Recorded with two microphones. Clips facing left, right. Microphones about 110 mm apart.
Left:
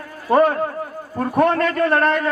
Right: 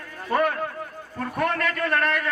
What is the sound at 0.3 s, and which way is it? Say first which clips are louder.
A man's voice: left 8 dB; 35° left (ahead or behind).